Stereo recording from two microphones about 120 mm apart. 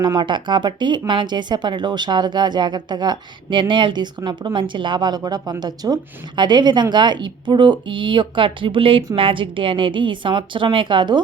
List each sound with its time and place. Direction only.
0.0 s speech: 40° right (ahead or behind)